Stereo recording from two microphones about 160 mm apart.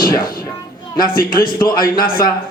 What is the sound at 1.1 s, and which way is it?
Speech, 60° left (ahead or behind).